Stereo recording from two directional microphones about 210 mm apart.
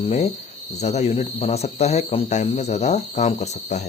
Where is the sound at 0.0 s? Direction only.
30° left (ahead or behind).